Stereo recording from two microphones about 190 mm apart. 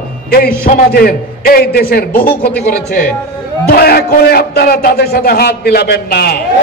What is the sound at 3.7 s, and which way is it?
A man's voice, 55° left (ahead or behind).